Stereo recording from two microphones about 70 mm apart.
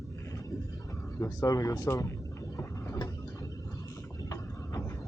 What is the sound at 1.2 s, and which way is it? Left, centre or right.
Speech, left.